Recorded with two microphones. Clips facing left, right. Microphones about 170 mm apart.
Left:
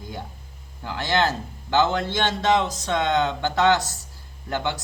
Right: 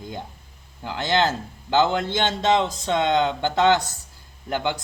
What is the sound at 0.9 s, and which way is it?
A man's voice, 20° right (ahead or behind).